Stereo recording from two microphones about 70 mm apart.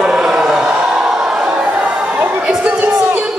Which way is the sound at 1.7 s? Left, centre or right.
Right.